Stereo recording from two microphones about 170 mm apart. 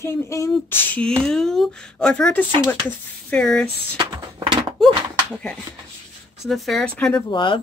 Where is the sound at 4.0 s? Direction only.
30° right (ahead or behind).